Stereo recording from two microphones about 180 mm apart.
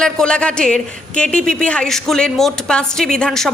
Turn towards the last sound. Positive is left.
turn(degrees=0)  # may be behind; listen again after turning